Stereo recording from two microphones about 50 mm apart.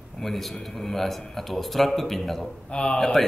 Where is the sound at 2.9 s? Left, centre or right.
Centre.